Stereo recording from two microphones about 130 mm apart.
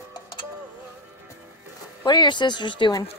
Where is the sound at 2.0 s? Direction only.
35° left (ahead or behind).